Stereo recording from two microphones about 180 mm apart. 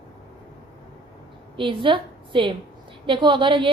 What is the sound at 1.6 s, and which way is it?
A woman's voice, 30° right (ahead or behind).